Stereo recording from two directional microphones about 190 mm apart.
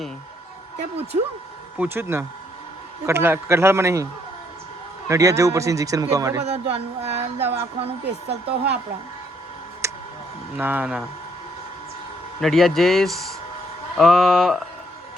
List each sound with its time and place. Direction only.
1.8 s speech: 10° right (ahead or behind)
6.4 s speech: 35° right (ahead or behind)
8.0 s speech: 60° right (ahead or behind)
9.8 s tick: 15° right (ahead or behind)
10.6 s speech: 10° right (ahead or behind)
12.4 s speech: centre (ahead or behind)